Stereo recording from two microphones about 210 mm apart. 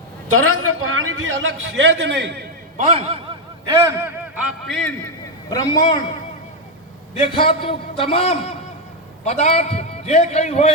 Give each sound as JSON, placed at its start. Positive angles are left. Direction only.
{"t": 0.3, "sound": "a man's voice", "side_deg": -85}
{"t": 2.7, "sound": "a man's voice", "side_deg": -30}
{"t": 3.8, "sound": "a man's voice", "side_deg": -15}
{"t": 4.6, "sound": "a man's voice", "side_deg": 0}
{"t": 5.5, "sound": "a man's voice", "side_deg": 15}
{"t": 7.2, "sound": "a man's voice", "side_deg": 25}